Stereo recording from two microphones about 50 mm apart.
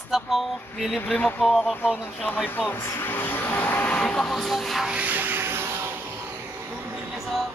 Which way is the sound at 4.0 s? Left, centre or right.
Centre.